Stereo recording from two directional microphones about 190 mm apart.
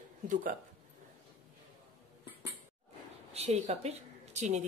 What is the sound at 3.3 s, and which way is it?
Speech, 35° right (ahead or behind).